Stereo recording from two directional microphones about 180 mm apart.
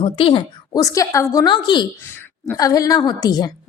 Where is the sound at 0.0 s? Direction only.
30° left (ahead or behind).